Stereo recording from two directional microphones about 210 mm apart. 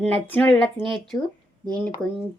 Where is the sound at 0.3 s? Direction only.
5° left (ahead or behind).